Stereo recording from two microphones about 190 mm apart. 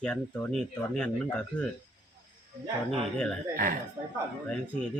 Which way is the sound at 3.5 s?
50° right (ahead or behind).